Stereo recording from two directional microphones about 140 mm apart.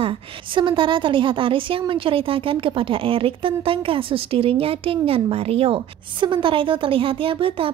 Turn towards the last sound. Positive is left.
turn(degrees=-40)  # may be behind; listen again after turning